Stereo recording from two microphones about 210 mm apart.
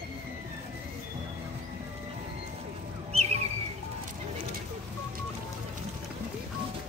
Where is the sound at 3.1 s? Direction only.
30° right (ahead or behind).